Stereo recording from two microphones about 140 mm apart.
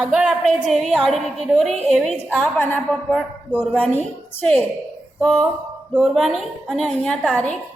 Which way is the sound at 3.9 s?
10° left (ahead or behind).